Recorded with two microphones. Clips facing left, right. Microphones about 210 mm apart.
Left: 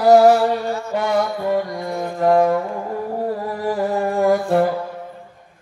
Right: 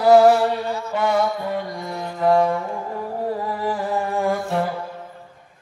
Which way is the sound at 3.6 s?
45° left (ahead or behind).